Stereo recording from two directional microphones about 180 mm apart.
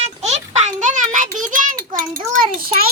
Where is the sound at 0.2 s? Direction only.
40° right (ahead or behind).